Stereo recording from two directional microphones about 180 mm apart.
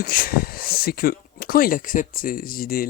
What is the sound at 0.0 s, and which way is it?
Speech, 55° left (ahead or behind).